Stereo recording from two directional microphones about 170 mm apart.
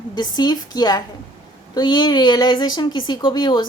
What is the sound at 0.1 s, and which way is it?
Speech, 25° left (ahead or behind).